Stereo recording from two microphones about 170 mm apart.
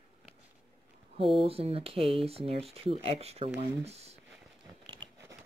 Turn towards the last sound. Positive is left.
turn(degrees=-40)  # may be behind; listen again after turning